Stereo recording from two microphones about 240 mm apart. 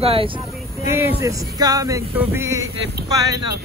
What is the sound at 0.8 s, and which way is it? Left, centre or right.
Speech, centre.